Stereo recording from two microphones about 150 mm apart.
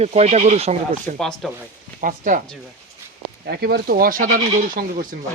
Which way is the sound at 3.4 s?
90° right.